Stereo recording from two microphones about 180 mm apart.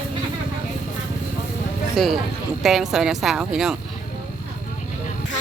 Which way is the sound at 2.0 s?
Centre (ahead or behind).